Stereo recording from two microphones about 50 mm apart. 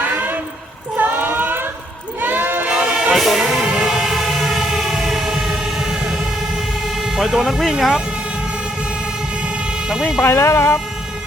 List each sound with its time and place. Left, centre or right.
0.9 s a sound: right
2.2 s crowd: right
2.6 s music: centre
3.2 s music: centre
7.3 s speech: centre
9.9 s speech: centre
10.2 s speech: left